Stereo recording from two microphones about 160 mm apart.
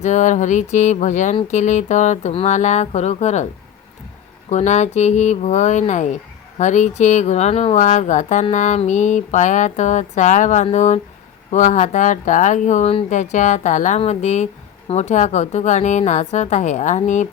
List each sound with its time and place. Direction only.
0.0 s speech: 50° left (ahead or behind)
4.4 s speech: 45° left (ahead or behind)